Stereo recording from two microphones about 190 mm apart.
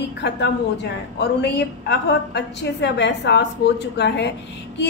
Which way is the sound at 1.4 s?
65° left (ahead or behind).